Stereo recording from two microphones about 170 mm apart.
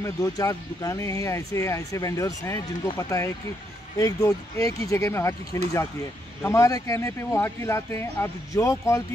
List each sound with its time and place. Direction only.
0.0 s speech: 20° left (ahead or behind)